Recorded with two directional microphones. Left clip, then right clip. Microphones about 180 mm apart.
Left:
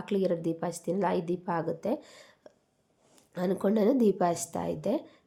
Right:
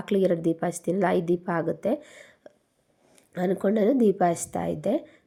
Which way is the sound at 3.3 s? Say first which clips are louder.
Right 4 dB; 10° right (ahead or behind).